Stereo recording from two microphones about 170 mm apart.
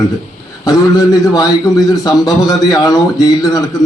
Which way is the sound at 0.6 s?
20° left (ahead or behind).